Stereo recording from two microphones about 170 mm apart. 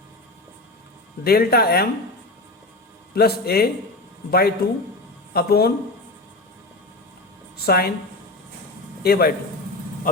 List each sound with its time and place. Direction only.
1.2 s a man's voice: 65° left (ahead or behind)
3.2 s a man's voice: 65° left (ahead or behind)
7.5 s a woman's voice: 65° left (ahead or behind)
9.0 s a man's voice: 65° left (ahead or behind)